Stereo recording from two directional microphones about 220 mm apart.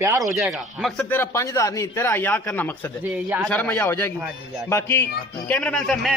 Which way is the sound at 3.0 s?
5° right (ahead or behind).